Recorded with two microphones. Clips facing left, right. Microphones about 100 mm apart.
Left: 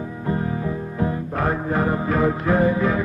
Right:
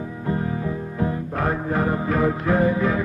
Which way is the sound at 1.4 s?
35° left (ahead or behind).